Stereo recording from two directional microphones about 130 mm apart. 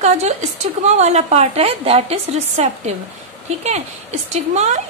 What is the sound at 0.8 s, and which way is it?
A woman's voice, 60° right (ahead or behind).